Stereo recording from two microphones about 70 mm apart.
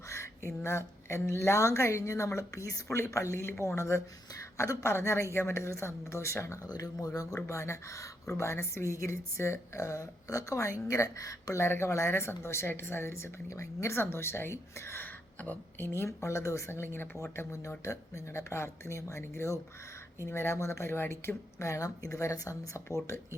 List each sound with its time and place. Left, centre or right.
0.1 s a woman's voice: left
6.7 s speech: left
7.4 s a woman's voice: left
15.0 s a sound: left
16.0 s a woman's voice: left